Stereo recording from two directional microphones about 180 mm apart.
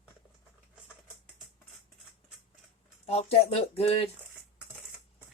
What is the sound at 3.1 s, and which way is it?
A woman's voice, 35° left (ahead or behind).